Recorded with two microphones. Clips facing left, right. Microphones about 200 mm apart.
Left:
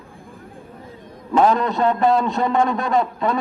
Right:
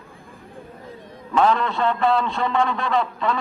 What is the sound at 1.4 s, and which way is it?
A man's voice, 40° left (ahead or behind).